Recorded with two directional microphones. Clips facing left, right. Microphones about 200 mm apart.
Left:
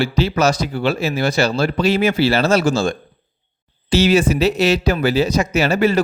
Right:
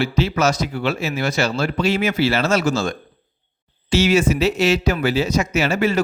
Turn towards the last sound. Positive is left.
turn(degrees=35)  # may be behind; listen again after turning